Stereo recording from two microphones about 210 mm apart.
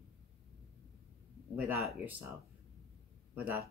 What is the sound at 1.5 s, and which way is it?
Speech, 10° right (ahead or behind).